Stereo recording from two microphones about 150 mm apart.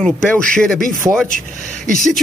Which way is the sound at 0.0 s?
5° left (ahead or behind).